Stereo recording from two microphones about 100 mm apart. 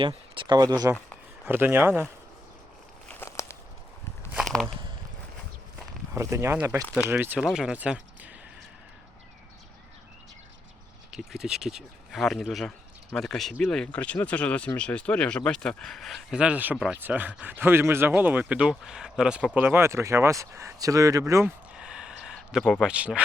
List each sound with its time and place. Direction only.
0.3 s speech: 45° right (ahead or behind)
1.5 s speech: 20° right (ahead or behind)
3.2 s walk: 30° left (ahead or behind)
4.4 s a sound: 5° left (ahead or behind)
6.1 s speech: 30° right (ahead or behind)
7.3 s speech: 5° right (ahead or behind)
11.1 s speech: 5° right (ahead or behind)
16.4 s speech: 15° right (ahead or behind)
19.5 s speech: 20° right (ahead or behind)
21.8 s a sound: 10° right (ahead or behind)
22.8 s speech: 10° right (ahead or behind)